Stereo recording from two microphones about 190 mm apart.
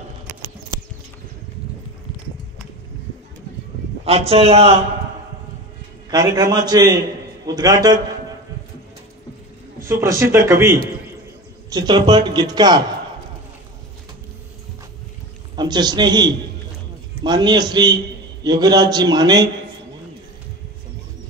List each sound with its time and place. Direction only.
4.3 s a man's voice: 30° right (ahead or behind)
6.0 s a man's voice: 20° right (ahead or behind)
9.8 s a man's voice: 15° right (ahead or behind)
11.7 s a man's voice: 20° right (ahead or behind)
15.5 s a man's voice: 20° right (ahead or behind)